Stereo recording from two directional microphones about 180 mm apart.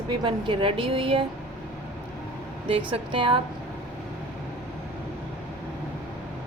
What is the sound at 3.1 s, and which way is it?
Speech, 30° right (ahead or behind).